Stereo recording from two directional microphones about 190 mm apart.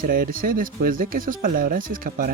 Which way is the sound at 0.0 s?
45° right (ahead or behind).